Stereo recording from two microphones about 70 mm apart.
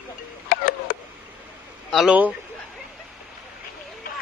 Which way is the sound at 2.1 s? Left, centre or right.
Right.